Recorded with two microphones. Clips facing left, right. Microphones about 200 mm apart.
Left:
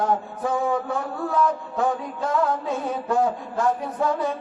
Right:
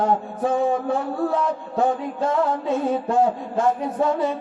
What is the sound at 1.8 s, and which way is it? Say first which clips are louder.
Music: right 3 dB; 25° right (ahead or behind).